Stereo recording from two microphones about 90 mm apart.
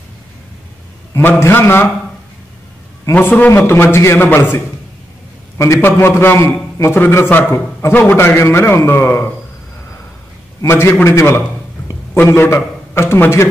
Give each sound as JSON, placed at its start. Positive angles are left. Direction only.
{"t": 1.1, "sound": "a man's voice", "side_deg": 25}
{"t": 3.1, "sound": "a man's voice", "side_deg": 20}
{"t": 5.6, "sound": "a man's voice", "side_deg": 30}
{"t": 10.6, "sound": "a man's voice", "side_deg": 30}